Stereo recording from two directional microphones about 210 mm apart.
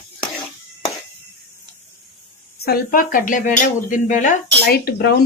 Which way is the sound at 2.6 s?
45° left (ahead or behind).